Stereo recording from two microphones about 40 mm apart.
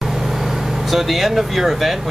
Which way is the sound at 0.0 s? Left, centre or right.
Centre.